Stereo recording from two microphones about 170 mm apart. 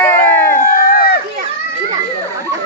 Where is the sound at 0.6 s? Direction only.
55° left (ahead or behind).